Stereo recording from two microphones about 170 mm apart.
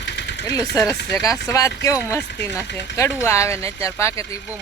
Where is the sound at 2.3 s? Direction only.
90° left.